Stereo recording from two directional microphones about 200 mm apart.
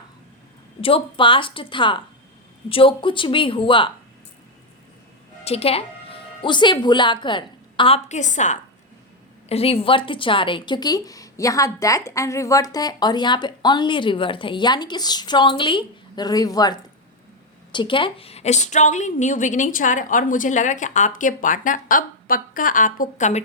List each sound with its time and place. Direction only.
0.8 s a woman's voice: 25° left (ahead or behind)
5.5 s a woman's voice: 30° left (ahead or behind)